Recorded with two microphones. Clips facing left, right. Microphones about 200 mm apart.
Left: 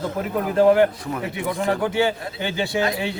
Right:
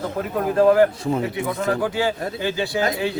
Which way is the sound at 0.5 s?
25° left (ahead or behind).